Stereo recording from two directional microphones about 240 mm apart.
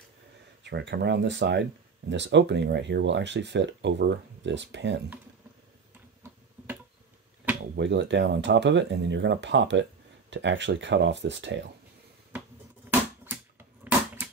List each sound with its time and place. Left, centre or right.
0.7 s speech: right
7.7 s speech: right
13.8 s crushing: centre